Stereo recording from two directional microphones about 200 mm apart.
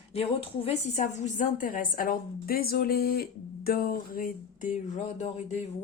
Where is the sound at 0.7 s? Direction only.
35° left (ahead or behind).